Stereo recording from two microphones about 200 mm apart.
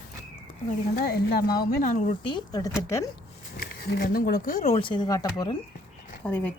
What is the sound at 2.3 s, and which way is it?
Speech, 20° left (ahead or behind).